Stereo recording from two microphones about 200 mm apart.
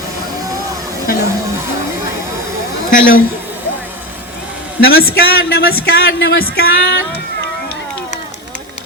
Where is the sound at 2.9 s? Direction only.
45° left (ahead or behind).